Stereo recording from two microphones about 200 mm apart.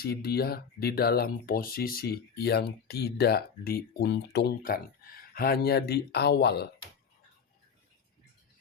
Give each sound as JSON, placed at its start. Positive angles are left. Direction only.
{"t": 0.0, "sound": "speech", "side_deg": 50}